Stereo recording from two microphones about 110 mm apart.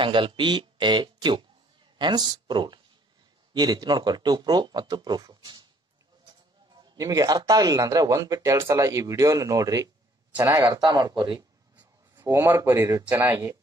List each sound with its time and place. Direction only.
0.0 s speech: 50° right (ahead or behind)
7.0 s speech: 35° right (ahead or behind)
10.8 s speech: 40° right (ahead or behind)
11.7 s a sound: 15° right (ahead or behind)
12.3 s speech: 30° right (ahead or behind)